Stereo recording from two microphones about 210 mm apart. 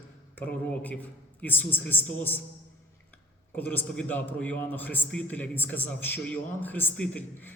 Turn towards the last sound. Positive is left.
turn(degrees=10)  # may be behind; listen again after turning